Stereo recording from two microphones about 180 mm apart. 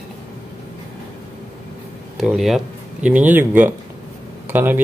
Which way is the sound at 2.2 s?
Centre (ahead or behind).